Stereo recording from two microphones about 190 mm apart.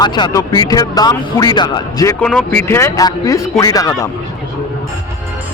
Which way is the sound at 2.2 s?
5° left (ahead or behind).